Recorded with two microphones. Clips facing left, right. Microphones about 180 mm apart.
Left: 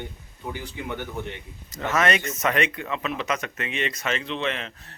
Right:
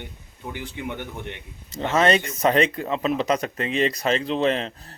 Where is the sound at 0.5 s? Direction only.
20° right (ahead or behind).